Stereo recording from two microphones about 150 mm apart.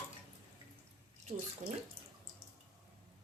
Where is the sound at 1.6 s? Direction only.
55° right (ahead or behind).